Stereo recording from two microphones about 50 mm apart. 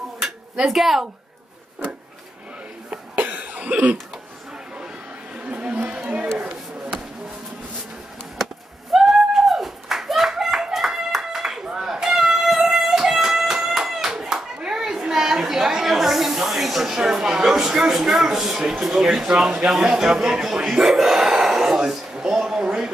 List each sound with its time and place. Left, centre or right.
0.7 s a woman's voice: centre
2.9 s cough: right
5.3 s a sound: right
6.4 s chop: centre
8.9 s clapping: centre
19.2 s speech: centre
19.7 s a sound: centre